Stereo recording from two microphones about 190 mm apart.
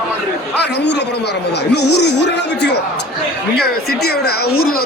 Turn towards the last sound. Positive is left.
turn(degrees=60)  # may be behind; listen again after turning